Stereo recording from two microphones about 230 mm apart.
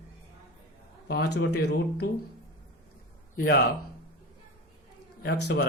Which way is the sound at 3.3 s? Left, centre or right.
Left.